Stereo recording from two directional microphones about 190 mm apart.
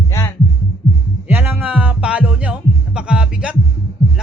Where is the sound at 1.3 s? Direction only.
10° right (ahead or behind).